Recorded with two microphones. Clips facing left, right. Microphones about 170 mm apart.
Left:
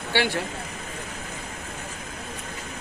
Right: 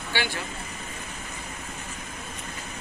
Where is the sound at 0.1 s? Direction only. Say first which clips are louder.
Left 6 dB; 65° left (ahead or behind).